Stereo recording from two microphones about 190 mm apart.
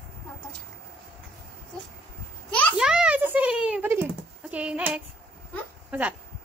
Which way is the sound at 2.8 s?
5° right (ahead or behind).